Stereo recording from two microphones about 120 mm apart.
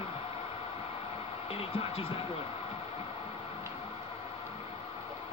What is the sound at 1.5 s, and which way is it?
Speech, 55° left (ahead or behind).